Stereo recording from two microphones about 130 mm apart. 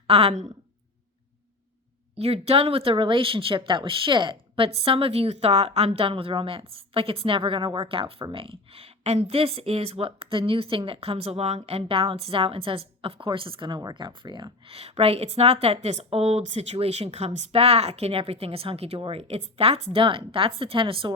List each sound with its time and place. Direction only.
0.1 s speech: 50° right (ahead or behind)
2.1 s speech: 50° right (ahead or behind); by 14.5 s 35° right (ahead or behind)
14.7 s speech: 50° right (ahead or behind)